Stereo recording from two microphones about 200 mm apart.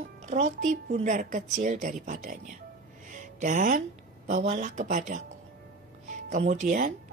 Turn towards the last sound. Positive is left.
turn(degrees=-40)  # may be behind; listen again after turning